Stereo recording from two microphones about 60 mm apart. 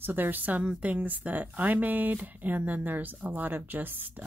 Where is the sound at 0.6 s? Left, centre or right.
Centre.